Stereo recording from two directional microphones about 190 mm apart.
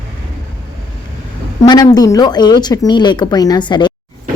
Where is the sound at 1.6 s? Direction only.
20° left (ahead or behind).